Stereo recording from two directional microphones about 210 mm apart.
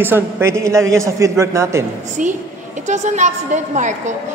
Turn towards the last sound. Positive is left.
turn(degrees=-35)  # may be behind; listen again after turning